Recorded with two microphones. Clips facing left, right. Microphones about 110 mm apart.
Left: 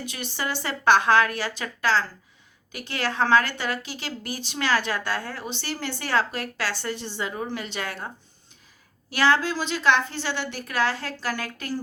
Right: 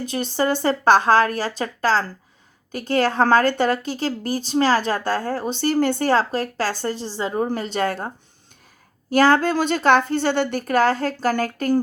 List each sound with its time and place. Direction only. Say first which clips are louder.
0.0 s a woman's voice: right 9 dB; 40° right (ahead or behind)